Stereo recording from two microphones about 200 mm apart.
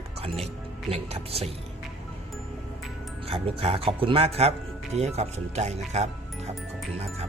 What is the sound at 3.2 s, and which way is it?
Speech, 30° right (ahead or behind).